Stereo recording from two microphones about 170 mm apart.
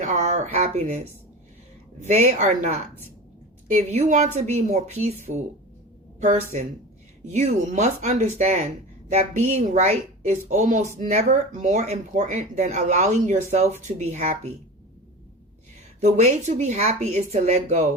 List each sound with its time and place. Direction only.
0.0 s a sound: 45° right (ahead or behind)
0.5 s a woman's voice: 45° right (ahead or behind)
6.1 s a woman's voice: 45° right (ahead or behind)
16.0 s a woman's voice: 40° right (ahead or behind)